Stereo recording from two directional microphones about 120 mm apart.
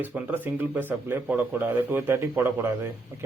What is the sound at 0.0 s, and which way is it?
A man's voice, 15° right (ahead or behind).